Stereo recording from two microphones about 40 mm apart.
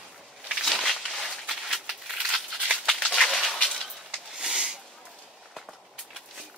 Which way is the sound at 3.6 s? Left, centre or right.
Centre.